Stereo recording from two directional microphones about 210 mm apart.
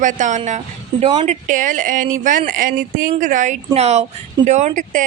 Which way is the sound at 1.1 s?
20° right (ahead or behind).